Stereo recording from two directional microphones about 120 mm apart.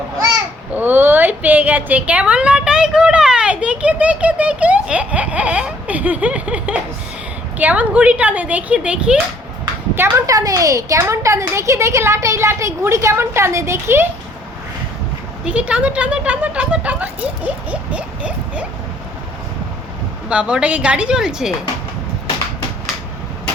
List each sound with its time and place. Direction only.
0.7 s speech: 15° right (ahead or behind)
9.9 s a woman's voice: 20° right (ahead or behind)
15.4 s speech: 10° right (ahead or behind)
20.3 s speech: 10° right (ahead or behind)